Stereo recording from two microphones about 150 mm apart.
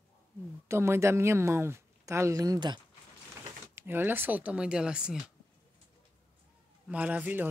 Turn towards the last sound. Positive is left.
turn(degrees=-10)  # may be behind; listen again after turning